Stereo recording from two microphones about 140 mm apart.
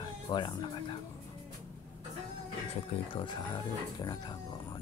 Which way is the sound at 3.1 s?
35° left (ahead or behind).